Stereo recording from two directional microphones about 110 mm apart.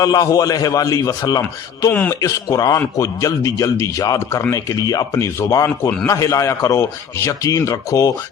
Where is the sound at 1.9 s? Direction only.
15° left (ahead or behind).